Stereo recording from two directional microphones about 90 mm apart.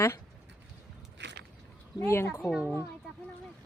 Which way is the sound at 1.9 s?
30° left (ahead or behind).